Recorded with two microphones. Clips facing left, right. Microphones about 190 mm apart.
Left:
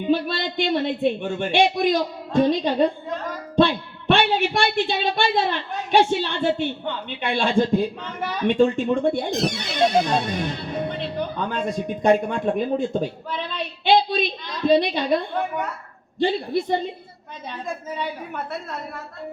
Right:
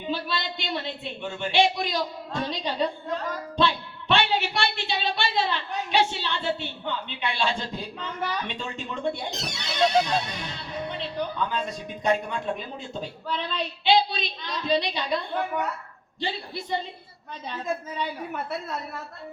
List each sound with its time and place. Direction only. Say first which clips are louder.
0.1 s speech: left 8 dB; 55° left (ahead or behind)